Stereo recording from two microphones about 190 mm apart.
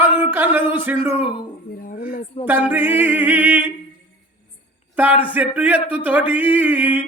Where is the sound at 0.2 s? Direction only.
10° right (ahead or behind).